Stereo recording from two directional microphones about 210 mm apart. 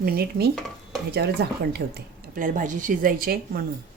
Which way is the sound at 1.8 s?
60° right (ahead or behind).